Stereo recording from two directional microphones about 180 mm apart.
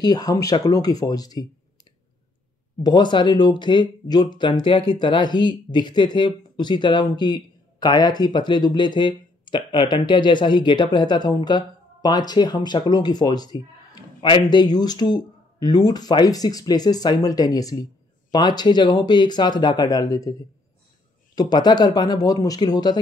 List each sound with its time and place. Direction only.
0.0 s speech: 20° left (ahead or behind)
2.8 s speech: 25° left (ahead or behind)